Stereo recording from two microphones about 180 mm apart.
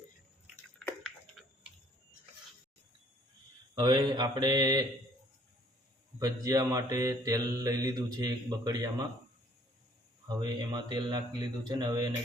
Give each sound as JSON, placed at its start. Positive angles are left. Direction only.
{"t": 1.0, "sound": "a sound", "side_deg": 0}
{"t": 3.8, "sound": "mantra", "side_deg": -25}
{"t": 6.1, "sound": "mantra", "side_deg": -20}
{"t": 10.2, "sound": "mantra", "side_deg": -25}